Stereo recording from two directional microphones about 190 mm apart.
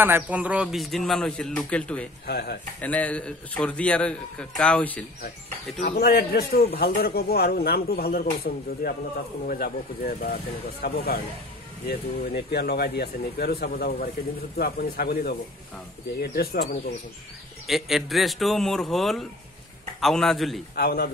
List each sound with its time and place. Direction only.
0.0 s a man's voice: 10° right (ahead or behind); by 2.0 s 5° left (ahead or behind)
2.2 s a man's voice: 55° left (ahead or behind)
2.8 s a man's voice: 5° left (ahead or behind)
5.8 s a man's voice: 50° left (ahead or behind)
17.6 s a man's voice: centre (ahead or behind)
20.7 s a man's voice: 55° left (ahead or behind)